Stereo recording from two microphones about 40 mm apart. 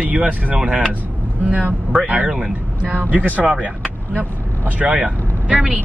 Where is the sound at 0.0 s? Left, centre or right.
Right.